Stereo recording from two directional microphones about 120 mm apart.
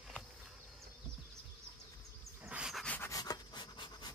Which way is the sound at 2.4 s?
10° right (ahead or behind).